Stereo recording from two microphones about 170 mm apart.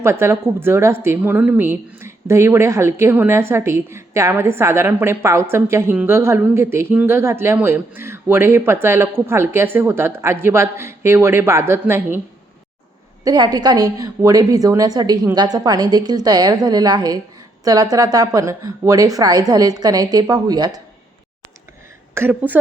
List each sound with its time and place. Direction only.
0.0 s speech: 15° right (ahead or behind)
13.2 s speech: 25° right (ahead or behind)
22.1 s speech: 10° right (ahead or behind)